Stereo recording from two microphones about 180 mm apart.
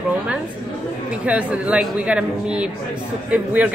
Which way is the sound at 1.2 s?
5° right (ahead or behind).